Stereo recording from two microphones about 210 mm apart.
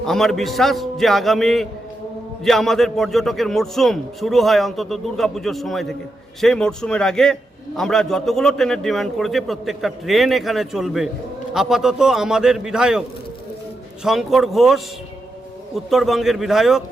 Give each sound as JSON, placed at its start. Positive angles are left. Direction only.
{"t": 0.0, "sound": "a man's voice", "side_deg": 0}